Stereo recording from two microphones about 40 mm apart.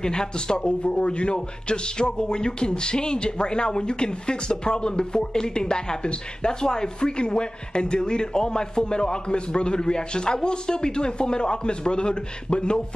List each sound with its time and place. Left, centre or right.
0.0 s speech: centre